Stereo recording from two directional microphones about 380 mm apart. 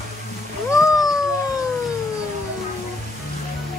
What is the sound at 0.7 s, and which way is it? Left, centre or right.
Cat, centre.